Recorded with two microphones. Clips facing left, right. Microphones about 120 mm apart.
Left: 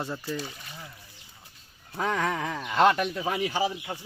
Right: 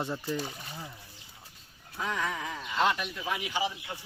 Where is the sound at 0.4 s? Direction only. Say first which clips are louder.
Right 1 dB; 35° right (ahead or behind).